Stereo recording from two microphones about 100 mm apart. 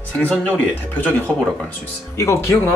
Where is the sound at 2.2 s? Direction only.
25° left (ahead or behind).